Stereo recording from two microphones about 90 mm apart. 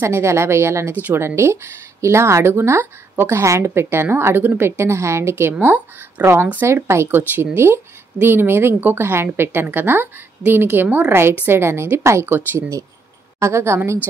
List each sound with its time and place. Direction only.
0.0 s a woman's voice: 30° right (ahead or behind)